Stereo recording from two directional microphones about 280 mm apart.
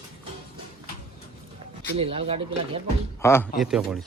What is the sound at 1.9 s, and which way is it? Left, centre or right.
Speech, centre.